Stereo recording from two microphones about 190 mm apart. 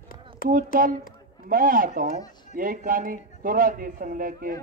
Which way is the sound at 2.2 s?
20° left (ahead or behind).